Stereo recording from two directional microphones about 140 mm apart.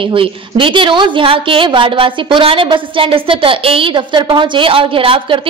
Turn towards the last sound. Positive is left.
turn(degrees=-40)  # may be behind; listen again after turning